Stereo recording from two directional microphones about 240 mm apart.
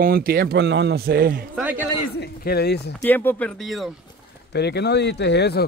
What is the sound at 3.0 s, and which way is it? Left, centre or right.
Speech, centre.